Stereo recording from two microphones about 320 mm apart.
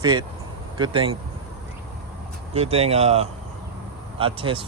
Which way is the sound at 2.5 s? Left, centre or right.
Centre.